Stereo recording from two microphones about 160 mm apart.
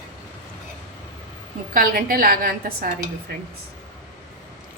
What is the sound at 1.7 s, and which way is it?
A woman's voice, 65° right (ahead or behind).